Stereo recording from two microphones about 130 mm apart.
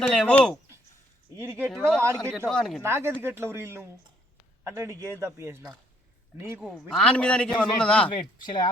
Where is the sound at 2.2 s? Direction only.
5° left (ahead or behind).